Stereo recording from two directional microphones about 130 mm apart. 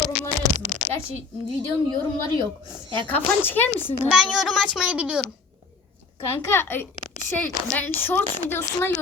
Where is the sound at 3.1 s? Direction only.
15° left (ahead or behind).